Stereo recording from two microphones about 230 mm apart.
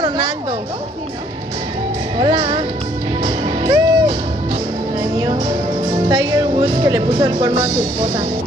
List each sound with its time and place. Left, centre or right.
2.1 s music: right
6.0 s music: centre